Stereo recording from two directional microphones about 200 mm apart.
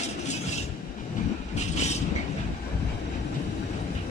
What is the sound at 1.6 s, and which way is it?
Vehicle, 35° left (ahead or behind).